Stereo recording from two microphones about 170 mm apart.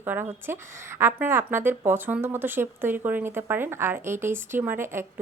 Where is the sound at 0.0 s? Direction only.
10° right (ahead or behind).